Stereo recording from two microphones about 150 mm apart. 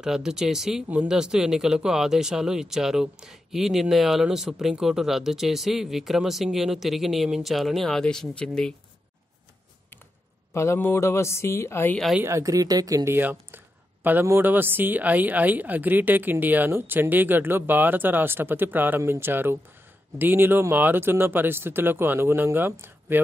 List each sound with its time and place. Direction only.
0.0 s speech: 5° right (ahead or behind)
10.5 s a woman's voice: 20° left (ahead or behind)
12.2 s speech: 20° right (ahead or behind)